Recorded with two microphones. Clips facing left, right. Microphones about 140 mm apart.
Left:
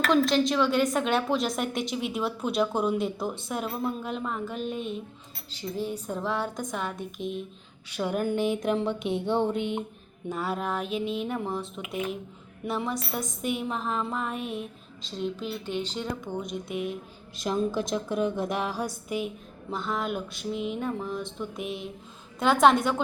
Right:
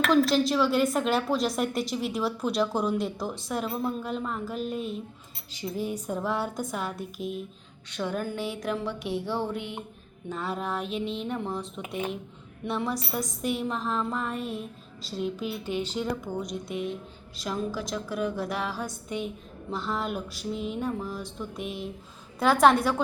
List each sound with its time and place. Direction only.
0.1 s a woman's voice: centre (ahead or behind)
5.5 s a woman's voice: 10° right (ahead or behind)
7.9 s a woman's voice: 10° left (ahead or behind)
10.2 s a woman's voice: 5° left (ahead or behind)
16.4 s a woman's voice: centre (ahead or behind)
17.3 s a woman's voice: 20° left (ahead or behind); by 23.0 s centre (ahead or behind)